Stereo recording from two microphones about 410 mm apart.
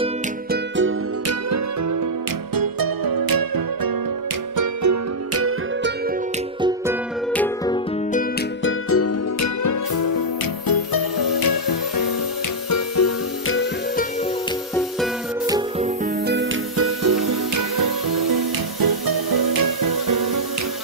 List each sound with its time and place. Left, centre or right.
0.0 s music: right
2.5 s music: right
4.6 s music: right
7.3 s music: centre
8.9 s music: left
12.6 s music: left
15.0 s music: centre
16.3 s music: right